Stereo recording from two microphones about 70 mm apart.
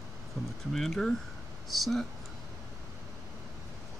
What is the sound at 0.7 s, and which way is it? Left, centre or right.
Speech, centre.